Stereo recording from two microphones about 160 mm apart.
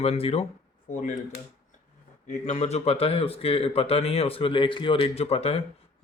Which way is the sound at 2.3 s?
45° left (ahead or behind).